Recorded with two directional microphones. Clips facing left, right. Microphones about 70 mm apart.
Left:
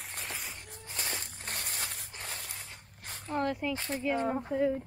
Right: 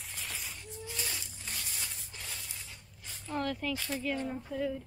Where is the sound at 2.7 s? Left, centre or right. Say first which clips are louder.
Left 4 dB; left.